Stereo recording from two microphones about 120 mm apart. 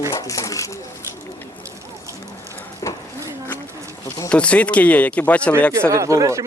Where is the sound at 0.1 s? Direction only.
30° left (ahead or behind).